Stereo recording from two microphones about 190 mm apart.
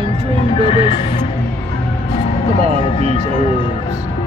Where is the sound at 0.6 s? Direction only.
30° left (ahead or behind).